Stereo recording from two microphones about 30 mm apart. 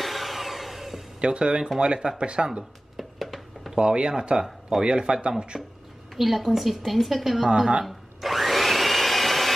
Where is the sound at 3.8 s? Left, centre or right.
Right.